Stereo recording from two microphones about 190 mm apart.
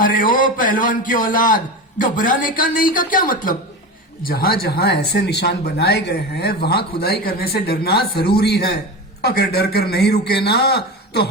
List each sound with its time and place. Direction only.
0.0 s a man's voice: 45° left (ahead or behind)